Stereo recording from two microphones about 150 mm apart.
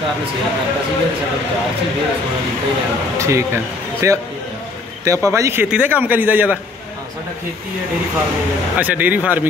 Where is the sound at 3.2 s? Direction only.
20° right (ahead or behind).